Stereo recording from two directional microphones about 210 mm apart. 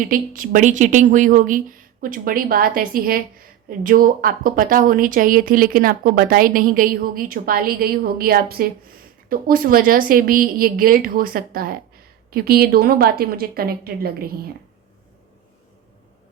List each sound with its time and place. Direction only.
0.0 s a woman's voice: 40° right (ahead or behind)